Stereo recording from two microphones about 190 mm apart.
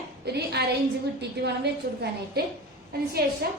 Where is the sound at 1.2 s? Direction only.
60° right (ahead or behind).